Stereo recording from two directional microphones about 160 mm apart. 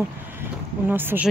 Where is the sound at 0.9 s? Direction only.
10° right (ahead or behind).